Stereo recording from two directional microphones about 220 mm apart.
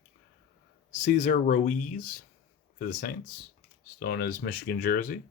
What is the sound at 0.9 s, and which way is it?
Speech, 35° left (ahead or behind).